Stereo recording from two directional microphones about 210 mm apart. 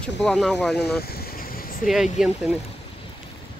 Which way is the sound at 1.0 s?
45° left (ahead or behind).